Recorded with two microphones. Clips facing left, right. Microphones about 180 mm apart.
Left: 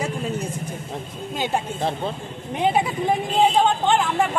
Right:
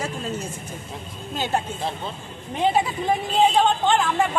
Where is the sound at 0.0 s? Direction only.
15° left (ahead or behind).